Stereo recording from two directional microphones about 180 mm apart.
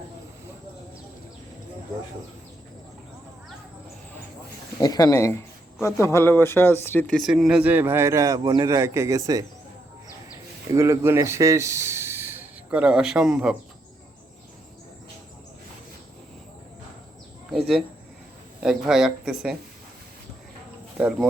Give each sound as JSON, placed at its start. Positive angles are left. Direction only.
{"t": 4.8, "sound": "speech", "side_deg": 20}
{"t": 7.2, "sound": "speech", "side_deg": 0}
{"t": 10.8, "sound": "speech", "side_deg": -15}
{"t": 18.6, "sound": "speech", "side_deg": -5}